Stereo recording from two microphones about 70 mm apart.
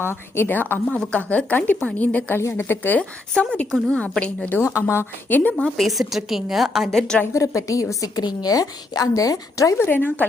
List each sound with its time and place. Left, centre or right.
0.0 s a woman's voice: left
2.4 s speech: left
3.0 s speech: centre
4.6 s speech: left
5.3 s a woman's voice: left
5.5 s a woman's voice: centre
7.3 s a woman's voice: left
9.7 s a woman's voice: left